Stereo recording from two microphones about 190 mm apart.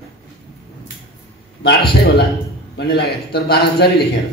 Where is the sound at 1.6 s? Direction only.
60° left (ahead or behind).